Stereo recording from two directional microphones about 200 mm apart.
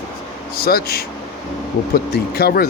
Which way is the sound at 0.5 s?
50° left (ahead or behind).